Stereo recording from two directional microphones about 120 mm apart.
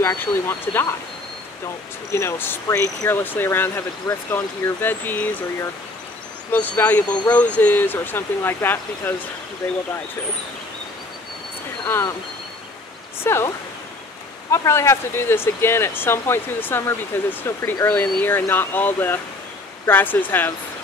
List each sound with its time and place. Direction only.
0.0 s speech: 20° left (ahead or behind)
2.1 s speech: 20° left (ahead or behind)
11.8 s speech: 20° left (ahead or behind)
13.2 s speech: 20° left (ahead or behind)
14.5 s speech: 25° left (ahead or behind)